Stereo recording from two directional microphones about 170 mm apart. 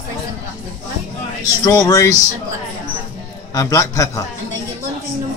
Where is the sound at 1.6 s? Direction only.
20° left (ahead or behind).